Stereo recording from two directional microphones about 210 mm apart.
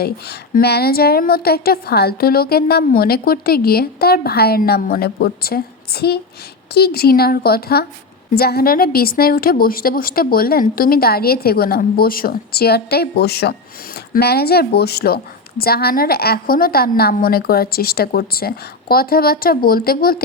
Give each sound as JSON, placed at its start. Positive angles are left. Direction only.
{"t": 0.0, "sound": "a woman's voice", "side_deg": 50}